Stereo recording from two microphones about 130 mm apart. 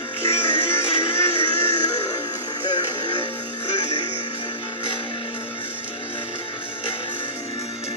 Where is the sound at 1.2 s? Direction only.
20° left (ahead or behind).